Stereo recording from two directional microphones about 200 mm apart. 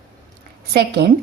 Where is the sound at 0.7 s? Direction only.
55° right (ahead or behind).